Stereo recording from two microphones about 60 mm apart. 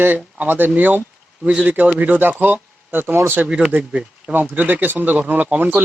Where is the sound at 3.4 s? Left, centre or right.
Centre.